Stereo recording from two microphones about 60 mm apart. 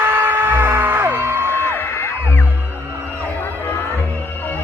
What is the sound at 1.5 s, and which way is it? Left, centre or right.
Music, left.